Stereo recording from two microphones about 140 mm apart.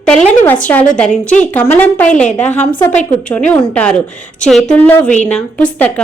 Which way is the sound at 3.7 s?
5° left (ahead or behind).